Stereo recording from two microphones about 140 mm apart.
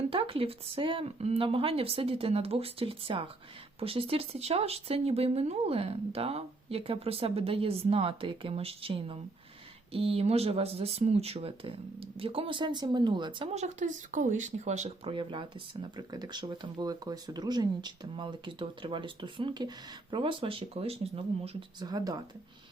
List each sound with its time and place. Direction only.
0.1 s speech: 40° right (ahead or behind)
13.5 s speech: 55° right (ahead or behind)
21.8 s speech: 30° right (ahead or behind)